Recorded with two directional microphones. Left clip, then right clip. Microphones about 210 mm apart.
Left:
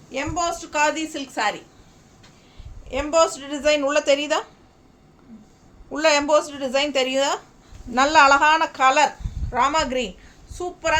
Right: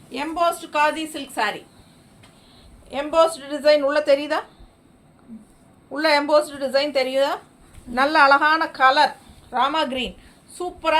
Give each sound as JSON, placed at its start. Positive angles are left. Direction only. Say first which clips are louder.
{"t": 0.1, "sound": "speech", "louder": "right 3 dB", "side_deg": 15}
{"t": 2.9, "sound": "a woman's voice", "louder": "right 1 dB", "side_deg": 15}
{"t": 5.9, "sound": "a woman's voice", "louder": "even", "side_deg": 25}